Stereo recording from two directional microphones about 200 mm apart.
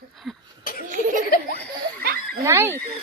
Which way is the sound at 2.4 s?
10° right (ahead or behind).